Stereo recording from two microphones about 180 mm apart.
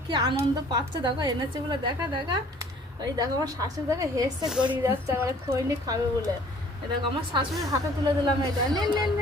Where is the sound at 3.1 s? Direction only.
20° right (ahead or behind).